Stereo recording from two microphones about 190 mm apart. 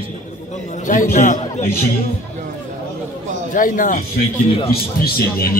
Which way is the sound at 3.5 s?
45° left (ahead or behind).